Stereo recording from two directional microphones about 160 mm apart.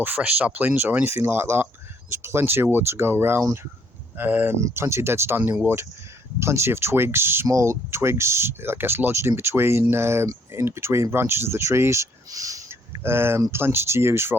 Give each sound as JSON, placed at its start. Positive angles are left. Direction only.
{"t": 0.0, "sound": "speech", "side_deg": -10}